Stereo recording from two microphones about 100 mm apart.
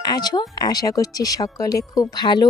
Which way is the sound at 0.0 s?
40° left (ahead or behind).